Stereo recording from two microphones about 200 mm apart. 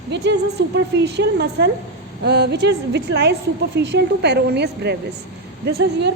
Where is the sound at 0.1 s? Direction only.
60° right (ahead or behind).